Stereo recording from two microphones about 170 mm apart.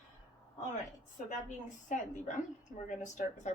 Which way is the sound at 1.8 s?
45° left (ahead or behind).